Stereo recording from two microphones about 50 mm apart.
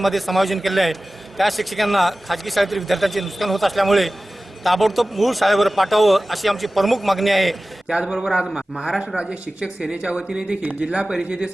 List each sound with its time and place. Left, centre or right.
0.0 s a man's voice: centre
7.9 s a man's voice: centre